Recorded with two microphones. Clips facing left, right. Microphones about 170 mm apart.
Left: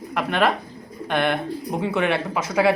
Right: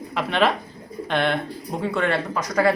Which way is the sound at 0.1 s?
5° left (ahead or behind).